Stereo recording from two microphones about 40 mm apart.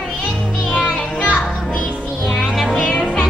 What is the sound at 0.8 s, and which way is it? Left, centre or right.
Music, left.